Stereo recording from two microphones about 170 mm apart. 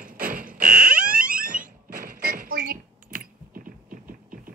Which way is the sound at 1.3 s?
55° right (ahead or behind).